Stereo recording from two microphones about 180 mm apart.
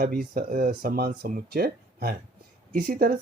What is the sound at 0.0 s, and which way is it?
Speech, 55° right (ahead or behind).